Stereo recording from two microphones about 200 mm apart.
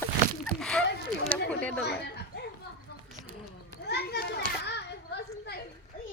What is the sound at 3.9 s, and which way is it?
Children playing, 55° left (ahead or behind).